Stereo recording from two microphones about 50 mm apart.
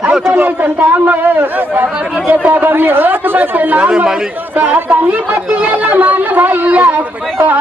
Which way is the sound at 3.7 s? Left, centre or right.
Right.